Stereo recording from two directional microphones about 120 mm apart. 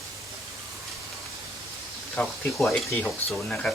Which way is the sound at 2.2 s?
15° left (ahead or behind).